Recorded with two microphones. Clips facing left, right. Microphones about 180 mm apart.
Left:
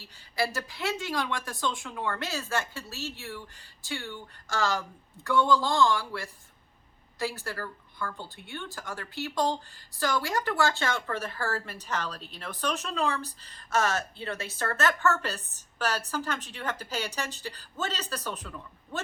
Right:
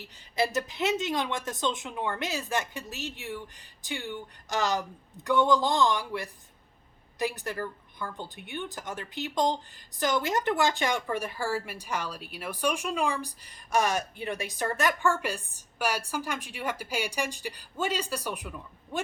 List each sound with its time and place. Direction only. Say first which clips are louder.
0.0 s speech: right 2 dB; 20° right (ahead or behind)